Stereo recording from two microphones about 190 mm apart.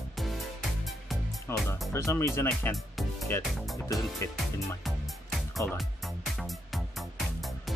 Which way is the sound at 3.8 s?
20° left (ahead or behind).